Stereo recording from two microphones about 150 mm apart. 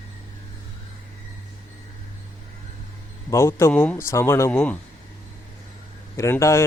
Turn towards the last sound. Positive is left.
turn(degrees=20)  # may be behind; listen again after turning